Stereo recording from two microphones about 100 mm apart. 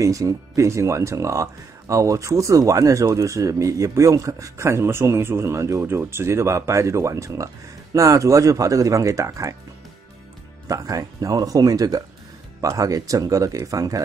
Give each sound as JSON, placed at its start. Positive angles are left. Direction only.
{"t": 0.0, "sound": "speech", "side_deg": -35}
{"t": 10.7, "sound": "speech", "side_deg": -35}